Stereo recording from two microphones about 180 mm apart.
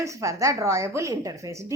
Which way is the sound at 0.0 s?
15° right (ahead or behind).